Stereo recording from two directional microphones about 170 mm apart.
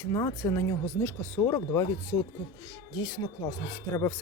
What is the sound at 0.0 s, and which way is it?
Speech, 20° left (ahead or behind).